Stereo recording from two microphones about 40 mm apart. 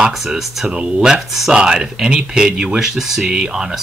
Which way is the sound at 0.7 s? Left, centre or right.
Right.